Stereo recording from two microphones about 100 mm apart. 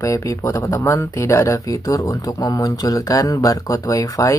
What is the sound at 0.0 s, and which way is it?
Speech, 30° left (ahead or behind).